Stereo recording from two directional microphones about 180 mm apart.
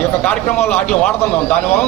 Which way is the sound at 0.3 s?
10° left (ahead or behind).